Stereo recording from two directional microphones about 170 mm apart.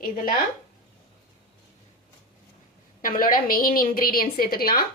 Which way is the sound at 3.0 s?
55° left (ahead or behind).